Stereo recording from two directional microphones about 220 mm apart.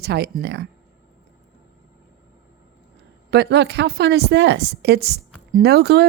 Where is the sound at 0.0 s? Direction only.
45° right (ahead or behind).